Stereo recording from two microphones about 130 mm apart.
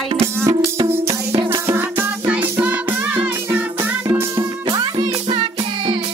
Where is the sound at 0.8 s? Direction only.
50° right (ahead or behind).